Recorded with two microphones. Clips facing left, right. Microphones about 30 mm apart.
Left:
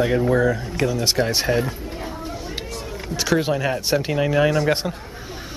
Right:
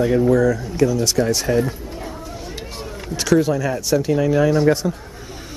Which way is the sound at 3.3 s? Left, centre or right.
Left.